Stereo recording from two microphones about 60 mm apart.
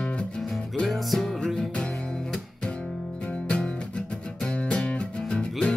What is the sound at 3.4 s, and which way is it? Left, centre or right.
Music, centre.